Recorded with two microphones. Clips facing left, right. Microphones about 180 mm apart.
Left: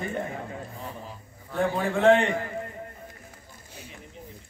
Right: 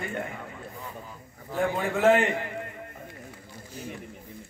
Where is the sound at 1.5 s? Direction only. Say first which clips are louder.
Left 1 dB; centre (ahead or behind).